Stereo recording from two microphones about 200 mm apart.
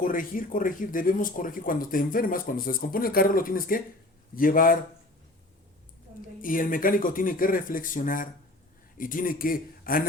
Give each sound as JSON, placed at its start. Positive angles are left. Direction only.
{"t": 0.0, "sound": "speech", "side_deg": 45}
{"t": 6.4, "sound": "speech", "side_deg": 45}